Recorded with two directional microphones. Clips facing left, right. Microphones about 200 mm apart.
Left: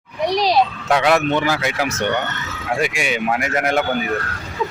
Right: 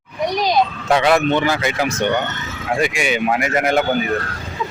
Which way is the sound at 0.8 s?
Centre (ahead or behind).